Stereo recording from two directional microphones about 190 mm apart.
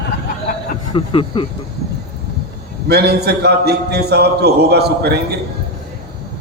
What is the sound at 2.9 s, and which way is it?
A man's voice, 60° right (ahead or behind).